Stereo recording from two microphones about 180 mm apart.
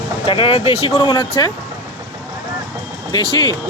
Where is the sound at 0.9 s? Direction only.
25° left (ahead or behind).